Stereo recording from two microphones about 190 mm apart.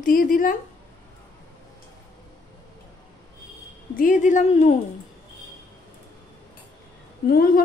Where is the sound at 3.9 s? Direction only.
45° left (ahead or behind).